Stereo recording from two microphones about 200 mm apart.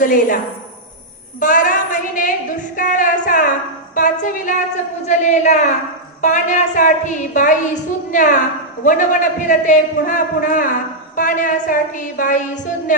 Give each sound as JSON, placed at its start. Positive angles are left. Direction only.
{"t": 0.0, "sound": "a man's voice", "side_deg": 40}
{"t": 1.4, "sound": "a man's voice", "side_deg": 40}